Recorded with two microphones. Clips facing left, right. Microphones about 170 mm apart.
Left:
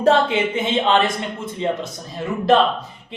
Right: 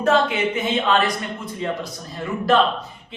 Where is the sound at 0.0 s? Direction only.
30° left (ahead or behind).